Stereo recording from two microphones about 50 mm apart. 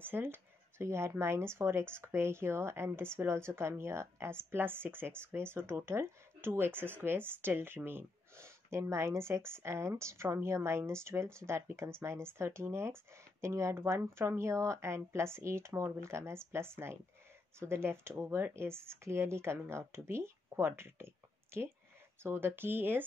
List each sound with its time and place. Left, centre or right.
0.0 s a sound: right
1.2 s a woman's voice: right
13.7 s a woman's voice: right
15.0 s speech: right